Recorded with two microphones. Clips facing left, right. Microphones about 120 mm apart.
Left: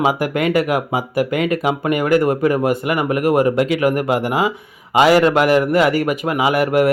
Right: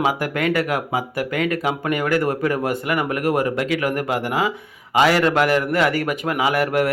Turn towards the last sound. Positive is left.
turn(degrees=10)  # may be behind; listen again after turning